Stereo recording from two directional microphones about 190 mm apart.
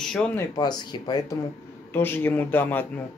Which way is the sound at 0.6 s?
25° left (ahead or behind).